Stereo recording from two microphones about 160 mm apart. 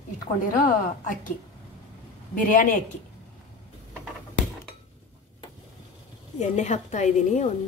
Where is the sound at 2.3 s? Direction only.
55° left (ahead or behind).